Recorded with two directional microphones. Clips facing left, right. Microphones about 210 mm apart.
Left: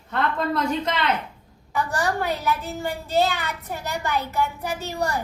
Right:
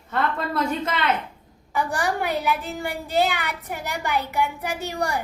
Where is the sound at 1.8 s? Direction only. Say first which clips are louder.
Even; 15° right (ahead or behind).